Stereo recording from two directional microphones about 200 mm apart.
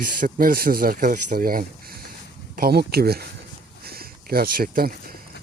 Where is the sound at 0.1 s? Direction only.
45° right (ahead or behind).